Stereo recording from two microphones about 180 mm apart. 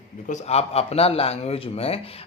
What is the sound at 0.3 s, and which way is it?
A man's voice, 35° left (ahead or behind).